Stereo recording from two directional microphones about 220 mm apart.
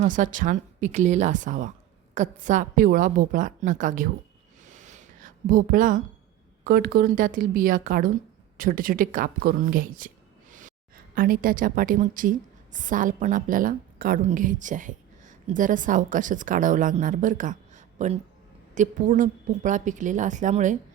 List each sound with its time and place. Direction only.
0.0 s a woman's voice: 35° right (ahead or behind)
4.6 s a sound: 35° right (ahead or behind)
6.7 s a woman's voice: 40° right (ahead or behind)